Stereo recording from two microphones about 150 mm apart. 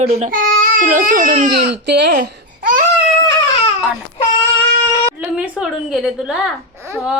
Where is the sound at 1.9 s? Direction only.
80° right.